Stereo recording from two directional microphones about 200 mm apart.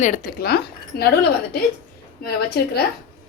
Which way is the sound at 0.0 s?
45° left (ahead or behind).